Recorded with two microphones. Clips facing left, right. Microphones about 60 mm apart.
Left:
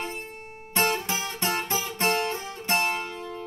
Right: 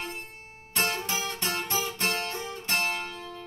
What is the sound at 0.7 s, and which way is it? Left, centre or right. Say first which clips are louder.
Music: left 4 dB; left.